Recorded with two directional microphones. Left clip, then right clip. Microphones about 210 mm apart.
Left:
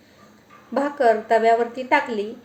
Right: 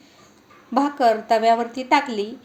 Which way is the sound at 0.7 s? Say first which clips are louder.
Even; 35° right (ahead or behind).